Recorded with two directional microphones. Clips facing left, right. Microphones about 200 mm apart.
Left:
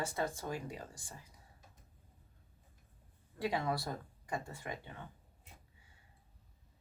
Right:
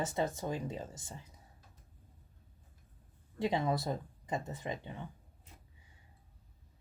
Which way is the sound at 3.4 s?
20° right (ahead or behind).